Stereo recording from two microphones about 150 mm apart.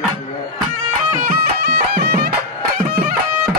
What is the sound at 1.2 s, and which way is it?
Music, 90° right.